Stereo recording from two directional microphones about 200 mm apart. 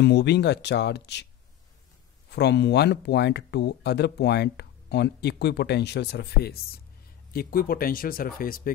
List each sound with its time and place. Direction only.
0.0 s speech: 55° left (ahead or behind)
2.3 s speech: 55° left (ahead or behind)